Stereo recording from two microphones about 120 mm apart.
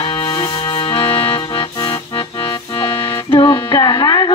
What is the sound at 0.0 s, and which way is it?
Music, 45° left (ahead or behind).